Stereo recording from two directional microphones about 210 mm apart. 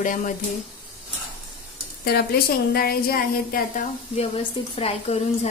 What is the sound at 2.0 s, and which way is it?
A woman's voice, 45° left (ahead or behind).